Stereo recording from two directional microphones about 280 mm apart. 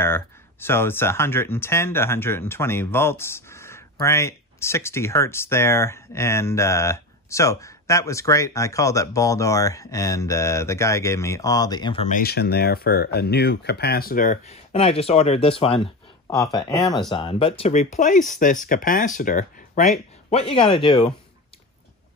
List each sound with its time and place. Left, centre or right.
0.0 s speech: centre
12.2 s speech: left; by 21.1 s centre